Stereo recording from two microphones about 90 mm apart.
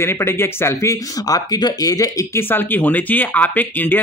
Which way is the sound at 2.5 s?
20° left (ahead or behind).